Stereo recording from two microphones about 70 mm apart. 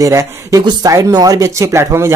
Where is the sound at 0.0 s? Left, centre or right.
Right.